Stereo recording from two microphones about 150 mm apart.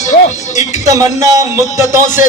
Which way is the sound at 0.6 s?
20° right (ahead or behind).